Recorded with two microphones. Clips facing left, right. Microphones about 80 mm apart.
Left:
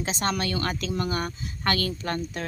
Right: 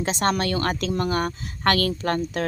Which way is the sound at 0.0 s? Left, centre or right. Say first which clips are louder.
Right 5 dB; right.